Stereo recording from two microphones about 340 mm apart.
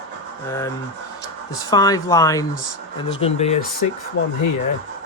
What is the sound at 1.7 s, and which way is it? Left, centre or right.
Speech, centre.